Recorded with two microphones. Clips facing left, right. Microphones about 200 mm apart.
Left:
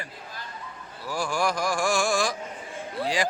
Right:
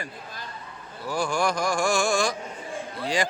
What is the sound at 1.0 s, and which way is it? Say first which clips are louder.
Speech: right 2 dB; centre (ahead or behind).